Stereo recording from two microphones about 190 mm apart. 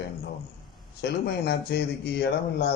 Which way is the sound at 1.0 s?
60° left (ahead or behind).